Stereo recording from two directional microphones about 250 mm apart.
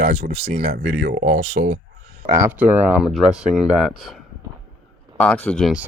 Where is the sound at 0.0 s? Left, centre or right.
Right.